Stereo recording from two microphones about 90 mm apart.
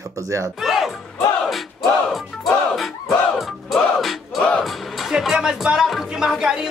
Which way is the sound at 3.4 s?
Centre (ahead or behind).